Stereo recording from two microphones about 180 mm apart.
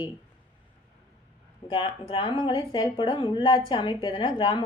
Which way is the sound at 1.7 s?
30° left (ahead or behind).